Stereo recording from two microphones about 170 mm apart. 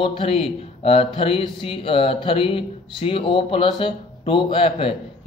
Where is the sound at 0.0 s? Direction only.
35° left (ahead or behind).